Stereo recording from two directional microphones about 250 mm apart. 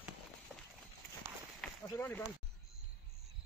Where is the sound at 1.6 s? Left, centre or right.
Centre.